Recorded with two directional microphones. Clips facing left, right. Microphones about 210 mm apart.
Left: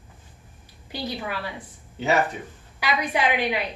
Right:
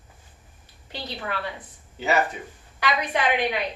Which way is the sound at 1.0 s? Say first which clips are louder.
Left 2 dB; 10° left (ahead or behind).